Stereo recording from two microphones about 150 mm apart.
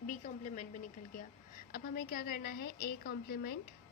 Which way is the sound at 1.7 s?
70° left (ahead or behind).